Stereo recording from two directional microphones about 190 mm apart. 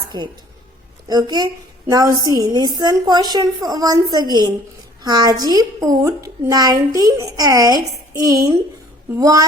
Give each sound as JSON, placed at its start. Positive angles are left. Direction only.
{"t": 0.1, "sound": "a woman's voice", "side_deg": -20}